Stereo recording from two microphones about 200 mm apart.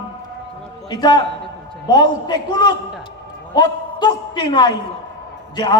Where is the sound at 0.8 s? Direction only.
20° left (ahead or behind).